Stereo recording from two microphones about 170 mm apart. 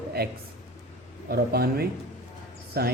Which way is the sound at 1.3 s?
65° right (ahead or behind).